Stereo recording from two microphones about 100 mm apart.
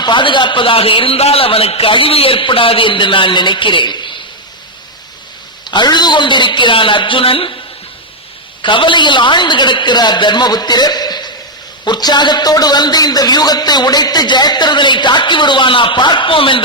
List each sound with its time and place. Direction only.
0.0 s a man's voice: 55° left (ahead or behind)
5.6 s a man's voice: 50° left (ahead or behind)
8.6 s a man's voice: 55° left (ahead or behind)